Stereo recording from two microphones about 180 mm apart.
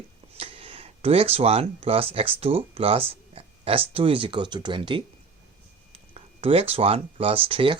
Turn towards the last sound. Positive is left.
turn(degrees=-30)  # may be behind; listen again after turning